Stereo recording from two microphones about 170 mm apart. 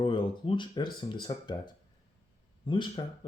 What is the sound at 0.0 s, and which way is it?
Speech, 30° left (ahead or behind).